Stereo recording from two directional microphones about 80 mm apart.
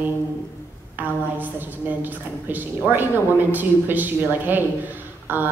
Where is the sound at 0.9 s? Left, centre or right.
Right.